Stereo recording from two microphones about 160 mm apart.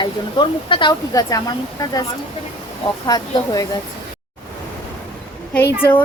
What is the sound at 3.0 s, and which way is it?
Speech, 25° left (ahead or behind).